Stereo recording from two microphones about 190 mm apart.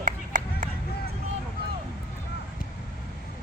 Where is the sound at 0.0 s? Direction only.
45° right (ahead or behind).